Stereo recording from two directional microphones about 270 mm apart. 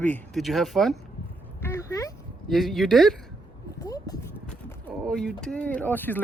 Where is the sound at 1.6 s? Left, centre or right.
Centre.